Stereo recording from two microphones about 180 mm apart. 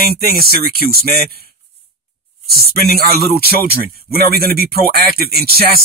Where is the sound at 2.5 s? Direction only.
60° right (ahead or behind).